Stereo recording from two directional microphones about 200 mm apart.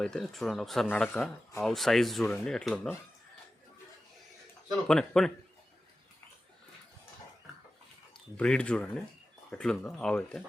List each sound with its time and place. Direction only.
0.0 s speech: centre (ahead or behind)
4.9 s speech: 5° left (ahead or behind)
8.4 s speech: 5° left (ahead or behind)